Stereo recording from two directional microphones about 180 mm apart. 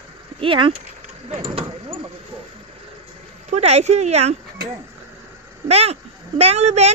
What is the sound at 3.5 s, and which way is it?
Speech, 35° right (ahead or behind).